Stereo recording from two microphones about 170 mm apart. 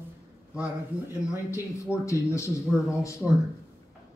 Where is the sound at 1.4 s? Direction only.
20° left (ahead or behind).